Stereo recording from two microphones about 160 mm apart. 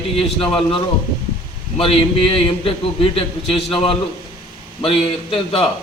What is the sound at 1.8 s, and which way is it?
A man's voice, 35° left (ahead or behind).